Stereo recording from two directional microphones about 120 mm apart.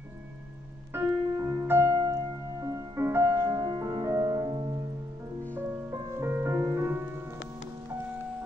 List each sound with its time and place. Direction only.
0.9 s piano: 25° right (ahead or behind)
2.6 s music: 25° right (ahead or behind)
4.5 s music: 50° right (ahead or behind)
5.5 s music: 20° right (ahead or behind)